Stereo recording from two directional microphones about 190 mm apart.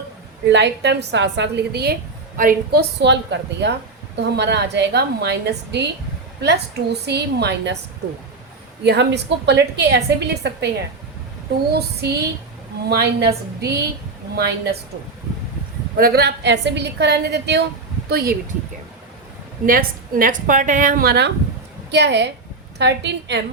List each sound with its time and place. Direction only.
0.5 s a woman's voice: 65° right (ahead or behind); by 2.8 s 45° right (ahead or behind)
3.0 s a woman's voice: 65° right (ahead or behind)
8.8 s a woman's voice: 65° right (ahead or behind)
11.7 s a woman's voice: 60° right (ahead or behind)
16.0 s a woman's voice: 50° right (ahead or behind)
19.6 s a woman's voice: 50° right (ahead or behind); by 23.4 s 65° right (ahead or behind)